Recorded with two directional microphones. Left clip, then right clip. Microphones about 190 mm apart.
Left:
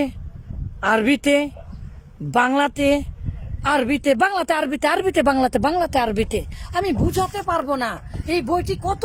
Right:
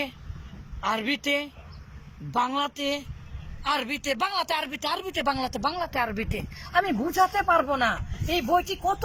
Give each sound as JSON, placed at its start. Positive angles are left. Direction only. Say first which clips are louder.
{"t": 0.8, "sound": "speech", "louder": "left 9 dB", "side_deg": 70}
{"t": 6.7, "sound": "speech", "louder": "left 1 dB", "side_deg": 20}